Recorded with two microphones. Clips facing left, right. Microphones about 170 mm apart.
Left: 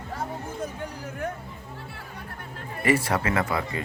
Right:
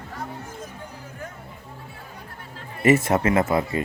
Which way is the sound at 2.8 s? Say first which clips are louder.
Right 5 dB; 25° right (ahead or behind).